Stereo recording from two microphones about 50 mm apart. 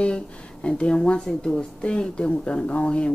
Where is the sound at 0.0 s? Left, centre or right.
Left.